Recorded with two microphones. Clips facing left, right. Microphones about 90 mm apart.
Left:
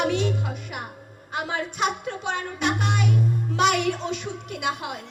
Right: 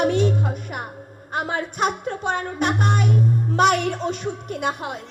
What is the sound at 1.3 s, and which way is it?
A child's voice, 45° right (ahead or behind).